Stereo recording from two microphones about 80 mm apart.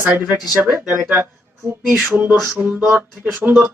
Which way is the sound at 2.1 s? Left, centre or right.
Right.